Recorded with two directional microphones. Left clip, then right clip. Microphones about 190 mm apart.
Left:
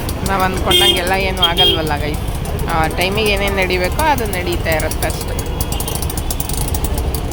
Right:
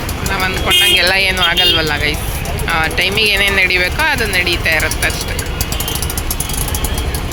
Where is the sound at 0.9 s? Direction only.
10° left (ahead or behind).